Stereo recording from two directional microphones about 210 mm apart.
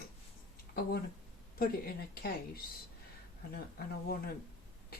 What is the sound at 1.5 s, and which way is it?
Speech, 45° left (ahead or behind).